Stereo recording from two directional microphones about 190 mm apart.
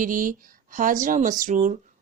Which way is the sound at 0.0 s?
45° right (ahead or behind).